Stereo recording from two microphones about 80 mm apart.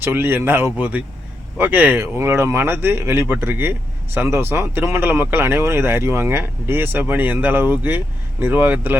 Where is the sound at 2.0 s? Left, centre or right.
Right.